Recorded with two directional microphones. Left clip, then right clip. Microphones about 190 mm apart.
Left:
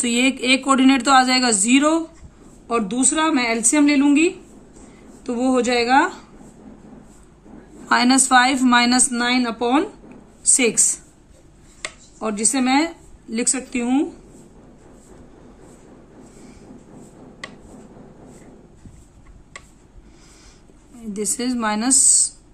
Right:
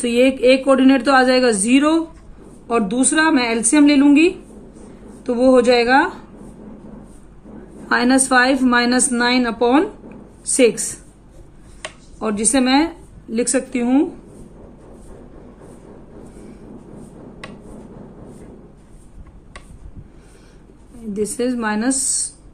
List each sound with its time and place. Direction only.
0.0 s a woman's voice: 30° left (ahead or behind)
7.9 s a woman's voice: 30° left (ahead or behind)
10.4 s a woman's voice: 25° left (ahead or behind)
12.2 s a woman's voice: 15° left (ahead or behind)
21.1 s a woman's voice: 25° left (ahead or behind)